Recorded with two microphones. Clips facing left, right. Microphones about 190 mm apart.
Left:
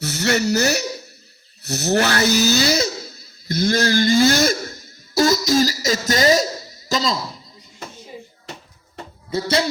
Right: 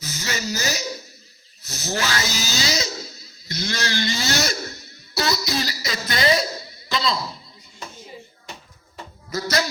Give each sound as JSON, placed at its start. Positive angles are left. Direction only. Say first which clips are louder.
{"t": 0.0, "sound": "speech", "louder": "left 10 dB", "side_deg": 65}
{"t": 1.6, "sound": "a sound", "louder": "left 8 dB", "side_deg": 65}
{"t": 9.3, "sound": "speech", "louder": "left 4 dB", "side_deg": 30}